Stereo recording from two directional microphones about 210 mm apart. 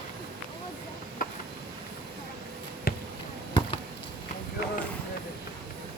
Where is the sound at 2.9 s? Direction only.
50° left (ahead or behind).